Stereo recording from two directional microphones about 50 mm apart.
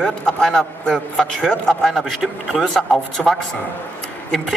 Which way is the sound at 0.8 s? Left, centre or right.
Centre.